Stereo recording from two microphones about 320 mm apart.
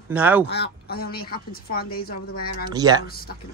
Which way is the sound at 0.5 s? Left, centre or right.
Left.